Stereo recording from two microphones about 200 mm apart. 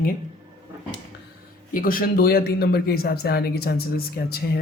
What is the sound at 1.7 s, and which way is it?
Speech, 45° left (ahead or behind).